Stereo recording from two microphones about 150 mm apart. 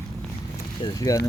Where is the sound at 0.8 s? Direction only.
25° left (ahead or behind).